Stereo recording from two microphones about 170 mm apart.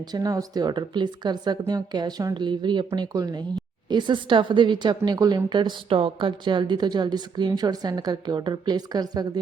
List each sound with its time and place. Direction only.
0.1 s speech: 20° right (ahead or behind)